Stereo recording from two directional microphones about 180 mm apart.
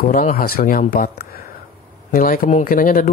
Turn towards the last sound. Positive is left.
turn(degrees=50)  # may be behind; listen again after turning